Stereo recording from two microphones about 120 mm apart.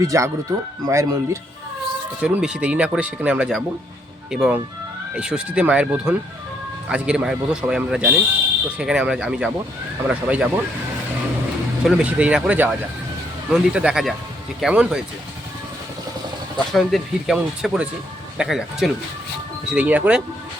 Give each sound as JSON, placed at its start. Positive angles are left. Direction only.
{"t": 0.0, "sound": "speech", "side_deg": -25}
{"t": 2.2, "sound": "speech", "side_deg": -5}
{"t": 11.9, "sound": "speech", "side_deg": -10}
{"t": 16.7, "sound": "speech", "side_deg": 0}